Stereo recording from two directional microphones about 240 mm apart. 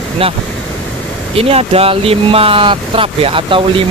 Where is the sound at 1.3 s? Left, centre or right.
Right.